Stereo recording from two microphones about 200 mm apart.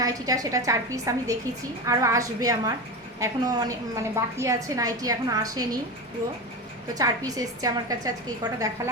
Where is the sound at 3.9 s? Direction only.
15° right (ahead or behind).